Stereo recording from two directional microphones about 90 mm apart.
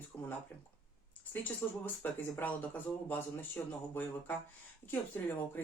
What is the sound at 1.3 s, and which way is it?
Speech, 20° left (ahead or behind).